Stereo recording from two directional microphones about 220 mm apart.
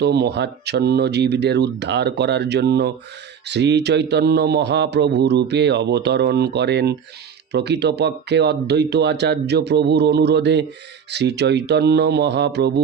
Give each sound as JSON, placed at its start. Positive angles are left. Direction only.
{"t": 0.0, "sound": "a man's voice", "side_deg": -50}